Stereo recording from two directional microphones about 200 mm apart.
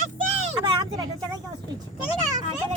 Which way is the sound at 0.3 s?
30° right (ahead or behind).